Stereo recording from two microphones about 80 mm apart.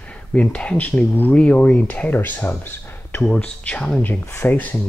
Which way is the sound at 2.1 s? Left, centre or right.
Left.